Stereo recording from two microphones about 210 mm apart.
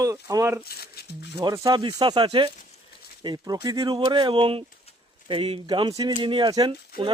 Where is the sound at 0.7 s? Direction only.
50° left (ahead or behind).